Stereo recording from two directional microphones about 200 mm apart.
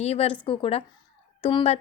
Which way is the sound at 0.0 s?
30° left (ahead or behind).